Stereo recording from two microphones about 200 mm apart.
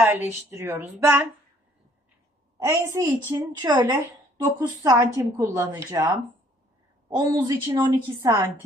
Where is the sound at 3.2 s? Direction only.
20° right (ahead or behind).